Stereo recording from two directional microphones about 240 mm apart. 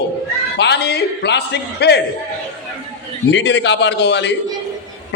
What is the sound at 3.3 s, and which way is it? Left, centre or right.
A man's voice, left.